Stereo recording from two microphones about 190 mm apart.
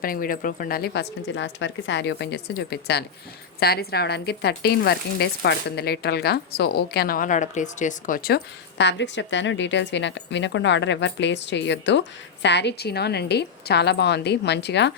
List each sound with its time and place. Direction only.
0.0 s speech: 50° left (ahead or behind)
8.8 s a woman's voice: 70° left (ahead or behind)